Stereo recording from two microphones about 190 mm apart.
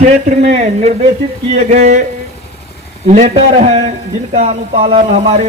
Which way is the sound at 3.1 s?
40° right (ahead or behind).